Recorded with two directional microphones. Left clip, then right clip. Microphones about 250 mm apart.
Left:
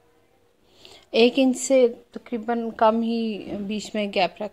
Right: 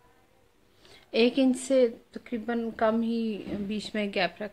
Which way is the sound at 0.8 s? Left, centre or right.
Centre.